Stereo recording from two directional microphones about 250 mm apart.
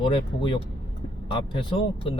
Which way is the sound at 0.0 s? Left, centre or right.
Centre.